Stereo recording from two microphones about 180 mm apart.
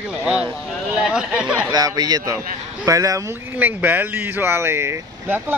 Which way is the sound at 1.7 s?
20° right (ahead or behind).